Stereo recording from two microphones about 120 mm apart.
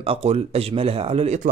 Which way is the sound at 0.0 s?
55° right (ahead or behind).